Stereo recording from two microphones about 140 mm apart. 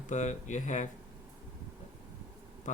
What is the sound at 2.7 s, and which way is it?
Speech, 60° left (ahead or behind).